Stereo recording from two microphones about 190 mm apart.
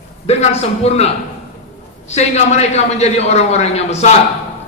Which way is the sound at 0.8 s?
35° left (ahead or behind).